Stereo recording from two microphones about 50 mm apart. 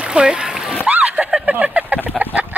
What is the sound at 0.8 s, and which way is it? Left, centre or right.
Splash, right.